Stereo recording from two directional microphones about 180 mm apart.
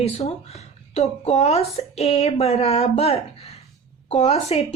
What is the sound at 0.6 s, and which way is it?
A woman's voice, 35° left (ahead or behind).